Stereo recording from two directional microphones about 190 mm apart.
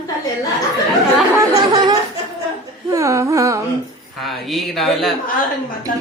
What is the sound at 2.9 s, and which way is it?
Humming, 15° right (ahead or behind).